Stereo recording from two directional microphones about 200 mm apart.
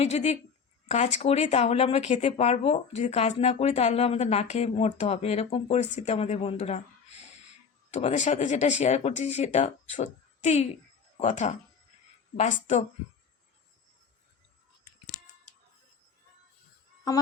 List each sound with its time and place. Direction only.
0.0 s speech: 35° left (ahead or behind)